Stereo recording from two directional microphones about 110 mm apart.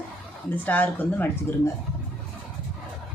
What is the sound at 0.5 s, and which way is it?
Speech, 15° left (ahead or behind).